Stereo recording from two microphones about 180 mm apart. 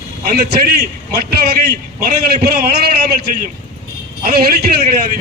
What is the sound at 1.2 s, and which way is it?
A man's voice, 60° right (ahead or behind).